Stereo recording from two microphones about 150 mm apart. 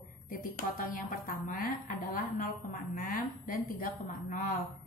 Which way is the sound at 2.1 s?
70° left (ahead or behind).